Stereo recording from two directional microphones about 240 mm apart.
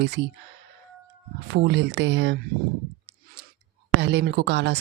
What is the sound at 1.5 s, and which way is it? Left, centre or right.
Speech, right.